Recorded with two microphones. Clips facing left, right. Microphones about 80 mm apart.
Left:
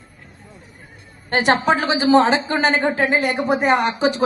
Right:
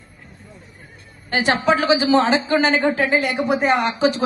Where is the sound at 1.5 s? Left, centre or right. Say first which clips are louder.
Right 1 dB; left.